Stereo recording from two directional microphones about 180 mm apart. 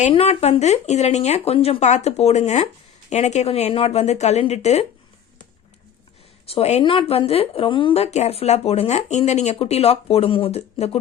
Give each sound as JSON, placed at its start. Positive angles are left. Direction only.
{"t": 0.0, "sound": "speech", "side_deg": 35}
{"t": 6.5, "sound": "speech", "side_deg": 35}